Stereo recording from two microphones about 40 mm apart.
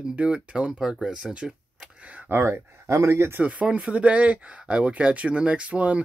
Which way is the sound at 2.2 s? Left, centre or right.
Right.